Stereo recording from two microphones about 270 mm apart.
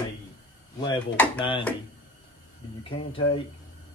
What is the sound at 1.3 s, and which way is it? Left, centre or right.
Speech, centre.